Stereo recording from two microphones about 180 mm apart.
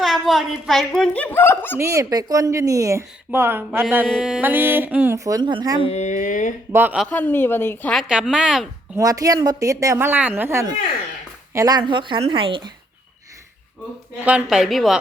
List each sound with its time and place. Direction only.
0.0 s speech: centre (ahead or behind)
1.8 s speech: 15° right (ahead or behind)
5.8 s speech: 35° left (ahead or behind)
6.7 s speech: 5° right (ahead or behind)
7.1 s a woman's voice: 10° left (ahead or behind)
8.0 s speech: 5° right (ahead or behind)
9.0 s a woman's voice: 20° right (ahead or behind)
14.3 s speech: 5° right (ahead or behind)